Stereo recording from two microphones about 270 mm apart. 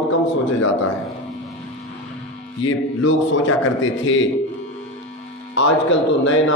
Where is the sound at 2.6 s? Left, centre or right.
Left.